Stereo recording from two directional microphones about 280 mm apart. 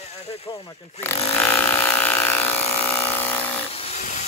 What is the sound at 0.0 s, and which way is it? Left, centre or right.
Speech, left.